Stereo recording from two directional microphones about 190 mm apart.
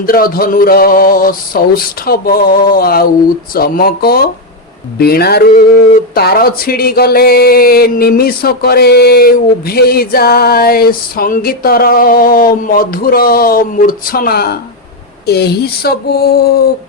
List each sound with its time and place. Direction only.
0.0 s speech: 50° left (ahead or behind)